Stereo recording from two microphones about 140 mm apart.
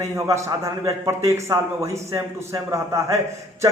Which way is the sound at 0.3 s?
20° right (ahead or behind).